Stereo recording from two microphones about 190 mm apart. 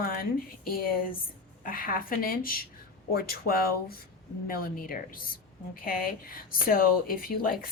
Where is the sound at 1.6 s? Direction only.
50° left (ahead or behind).